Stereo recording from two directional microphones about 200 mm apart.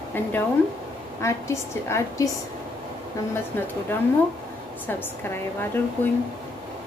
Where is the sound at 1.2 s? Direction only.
15° left (ahead or behind).